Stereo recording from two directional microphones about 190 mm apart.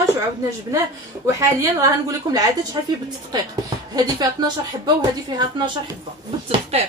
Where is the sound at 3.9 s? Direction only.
20° right (ahead or behind).